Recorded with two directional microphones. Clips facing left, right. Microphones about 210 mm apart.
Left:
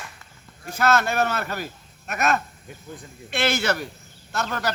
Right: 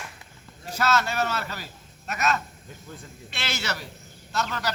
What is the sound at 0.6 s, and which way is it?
A man's voice, 55° left (ahead or behind).